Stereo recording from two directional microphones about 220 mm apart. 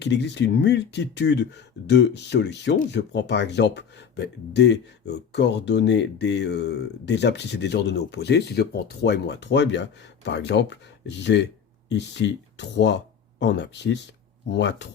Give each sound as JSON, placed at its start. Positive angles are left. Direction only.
{"t": 0.0, "sound": "speech", "side_deg": 50}